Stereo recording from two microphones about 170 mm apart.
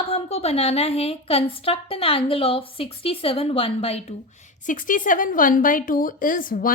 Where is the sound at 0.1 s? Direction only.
35° left (ahead or behind).